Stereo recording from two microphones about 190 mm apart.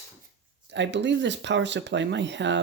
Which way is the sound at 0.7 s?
70° right (ahead or behind).